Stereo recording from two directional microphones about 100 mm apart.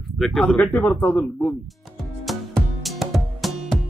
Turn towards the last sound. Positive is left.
turn(degrees=0)  # may be behind; listen again after turning